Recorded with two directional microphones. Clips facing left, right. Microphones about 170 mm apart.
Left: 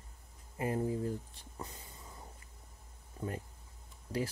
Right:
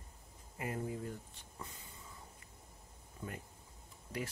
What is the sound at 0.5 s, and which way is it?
Speech, 30° left (ahead or behind).